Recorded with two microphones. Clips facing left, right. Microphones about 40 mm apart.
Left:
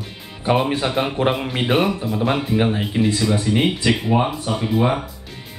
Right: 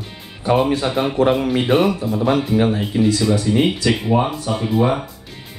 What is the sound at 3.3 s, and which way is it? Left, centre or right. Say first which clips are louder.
Speech: right 2 dB; left.